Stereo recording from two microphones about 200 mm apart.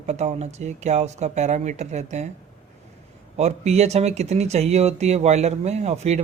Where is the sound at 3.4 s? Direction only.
35° right (ahead or behind).